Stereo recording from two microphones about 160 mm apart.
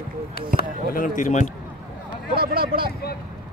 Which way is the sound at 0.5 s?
65° left (ahead or behind).